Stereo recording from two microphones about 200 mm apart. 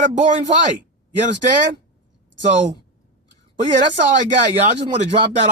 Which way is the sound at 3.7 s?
40° right (ahead or behind).